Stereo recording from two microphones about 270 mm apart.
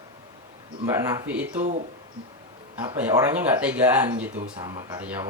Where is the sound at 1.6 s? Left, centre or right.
Right.